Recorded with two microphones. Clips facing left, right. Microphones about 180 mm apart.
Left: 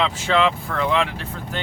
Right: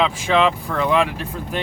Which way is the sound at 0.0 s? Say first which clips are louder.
Right 2 dB; 15° right (ahead or behind).